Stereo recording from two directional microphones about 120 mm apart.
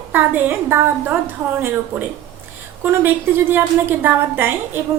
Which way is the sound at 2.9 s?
20° right (ahead or behind).